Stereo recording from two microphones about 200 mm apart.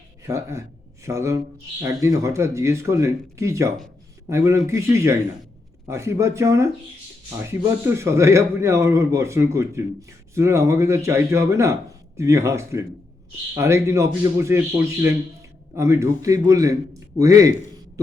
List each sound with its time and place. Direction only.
0.3 s a man's voice: 15° right (ahead or behind)